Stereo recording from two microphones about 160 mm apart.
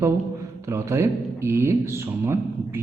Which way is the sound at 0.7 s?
20° right (ahead or behind).